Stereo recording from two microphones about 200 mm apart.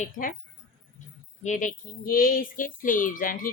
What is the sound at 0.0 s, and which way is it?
Music, 45° left (ahead or behind).